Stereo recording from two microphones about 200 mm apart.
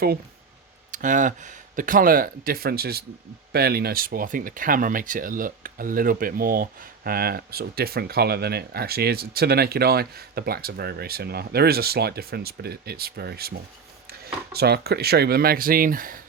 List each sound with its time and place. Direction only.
0.9 s speech: 40° right (ahead or behind)